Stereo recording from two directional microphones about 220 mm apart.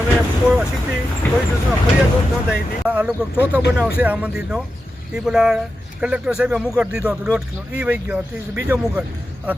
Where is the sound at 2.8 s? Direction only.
5° right (ahead or behind).